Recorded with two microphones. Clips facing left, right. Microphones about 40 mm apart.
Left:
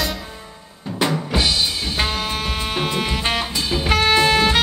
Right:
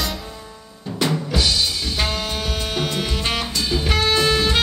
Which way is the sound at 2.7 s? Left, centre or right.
Left.